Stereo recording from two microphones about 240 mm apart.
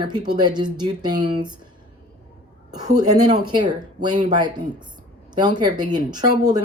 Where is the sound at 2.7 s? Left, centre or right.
Centre.